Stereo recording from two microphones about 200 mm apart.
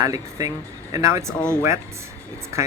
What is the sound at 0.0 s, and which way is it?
Speech, 15° right (ahead or behind).